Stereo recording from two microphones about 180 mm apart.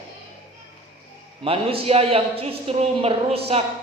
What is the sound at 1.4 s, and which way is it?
A woman's voice, 30° right (ahead or behind).